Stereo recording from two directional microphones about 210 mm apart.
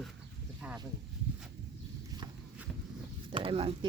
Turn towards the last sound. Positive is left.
turn(degrees=-25)  # may be behind; listen again after turning